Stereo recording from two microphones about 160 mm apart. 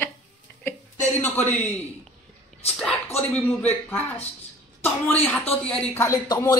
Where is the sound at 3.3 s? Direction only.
10° left (ahead or behind).